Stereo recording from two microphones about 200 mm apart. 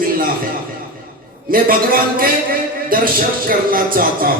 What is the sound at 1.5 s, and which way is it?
A man's voice, 45° right (ahead or behind).